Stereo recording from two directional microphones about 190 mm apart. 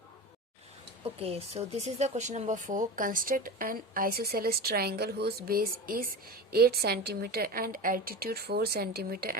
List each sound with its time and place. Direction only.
1.2 s speech: 35° right (ahead or behind); by 9.4 s 50° right (ahead or behind)